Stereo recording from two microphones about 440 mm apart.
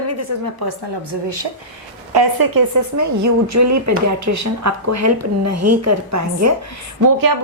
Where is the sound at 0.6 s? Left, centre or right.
Right.